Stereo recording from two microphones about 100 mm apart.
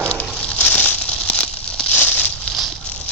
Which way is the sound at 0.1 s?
10° left (ahead or behind).